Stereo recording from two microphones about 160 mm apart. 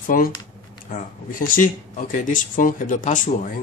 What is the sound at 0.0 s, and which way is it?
Speech, 60° left (ahead or behind).